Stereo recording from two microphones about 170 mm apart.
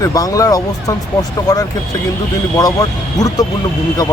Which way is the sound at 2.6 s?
20° left (ahead or behind).